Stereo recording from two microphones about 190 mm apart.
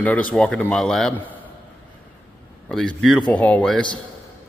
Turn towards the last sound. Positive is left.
turn(degrees=5)  # may be behind; listen again after turning